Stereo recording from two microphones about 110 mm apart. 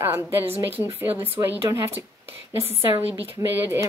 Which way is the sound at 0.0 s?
20° right (ahead or behind).